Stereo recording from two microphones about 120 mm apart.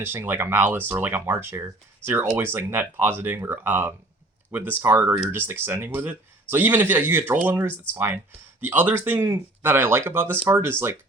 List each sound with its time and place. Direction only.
0.0 s speech: 20° right (ahead or behind)